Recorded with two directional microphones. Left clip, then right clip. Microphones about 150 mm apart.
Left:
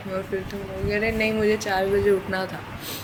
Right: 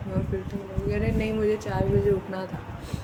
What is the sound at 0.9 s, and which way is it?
Speech, 25° right (ahead or behind).